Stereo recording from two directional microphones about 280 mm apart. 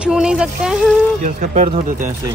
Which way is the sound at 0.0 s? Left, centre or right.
Centre.